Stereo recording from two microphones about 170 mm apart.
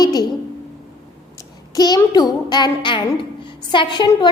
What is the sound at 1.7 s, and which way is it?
A child's voice, 25° left (ahead or behind).